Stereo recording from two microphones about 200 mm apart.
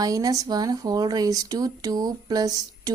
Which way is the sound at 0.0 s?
15° right (ahead or behind).